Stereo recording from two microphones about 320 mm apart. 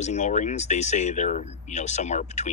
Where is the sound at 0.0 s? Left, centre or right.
Left.